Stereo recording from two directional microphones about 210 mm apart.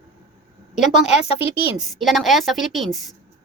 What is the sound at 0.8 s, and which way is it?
Speech, centre (ahead or behind).